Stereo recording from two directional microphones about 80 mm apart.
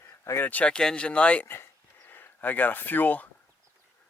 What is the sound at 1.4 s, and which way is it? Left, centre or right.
Speech, left.